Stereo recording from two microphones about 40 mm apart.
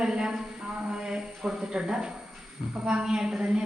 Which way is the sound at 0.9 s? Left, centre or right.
Centre.